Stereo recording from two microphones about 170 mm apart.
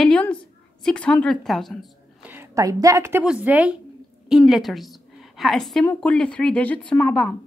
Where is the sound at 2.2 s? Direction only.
15° right (ahead or behind).